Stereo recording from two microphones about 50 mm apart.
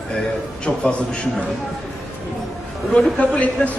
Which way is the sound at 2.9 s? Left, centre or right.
Left.